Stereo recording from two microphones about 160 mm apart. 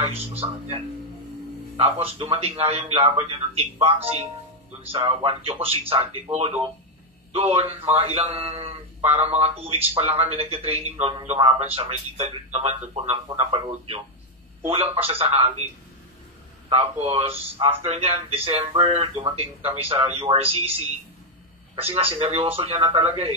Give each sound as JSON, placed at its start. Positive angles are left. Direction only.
{"t": 0.1, "sound": "a man's voice", "side_deg": -35}
{"t": 1.8, "sound": "a man's voice", "side_deg": -35}
{"t": 7.3, "sound": "a man's voice", "side_deg": -40}
{"t": 16.6, "sound": "a man's voice", "side_deg": -35}